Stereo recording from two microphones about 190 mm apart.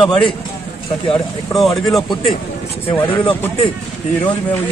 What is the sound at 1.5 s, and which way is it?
Speech, centre (ahead or behind).